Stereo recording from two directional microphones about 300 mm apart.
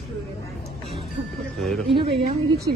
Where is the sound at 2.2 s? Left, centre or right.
Right.